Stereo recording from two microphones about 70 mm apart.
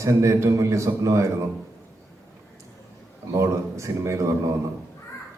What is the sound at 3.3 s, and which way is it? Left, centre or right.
Speech, right.